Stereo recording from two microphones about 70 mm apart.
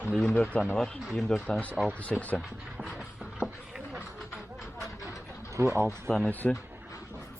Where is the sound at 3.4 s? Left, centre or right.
Centre.